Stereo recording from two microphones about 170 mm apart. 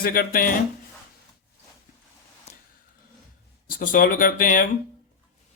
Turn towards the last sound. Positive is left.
turn(degrees=55)  # may be behind; listen again after turning